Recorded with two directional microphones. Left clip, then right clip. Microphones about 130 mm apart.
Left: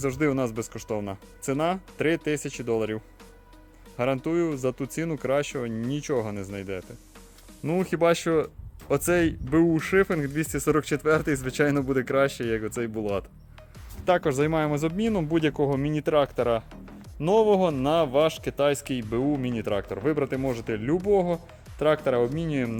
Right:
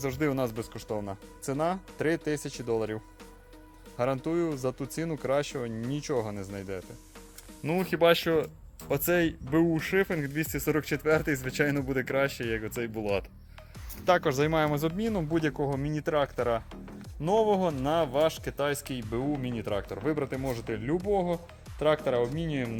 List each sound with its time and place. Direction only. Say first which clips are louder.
0.0 s speech: left 4 dB; 45° left (ahead or behind)